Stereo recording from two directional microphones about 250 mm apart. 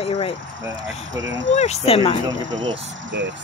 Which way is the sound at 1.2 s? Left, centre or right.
Right.